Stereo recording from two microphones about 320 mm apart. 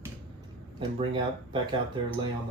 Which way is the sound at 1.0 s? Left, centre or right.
Centre.